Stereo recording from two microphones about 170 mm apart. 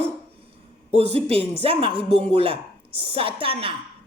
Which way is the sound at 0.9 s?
35° right (ahead or behind).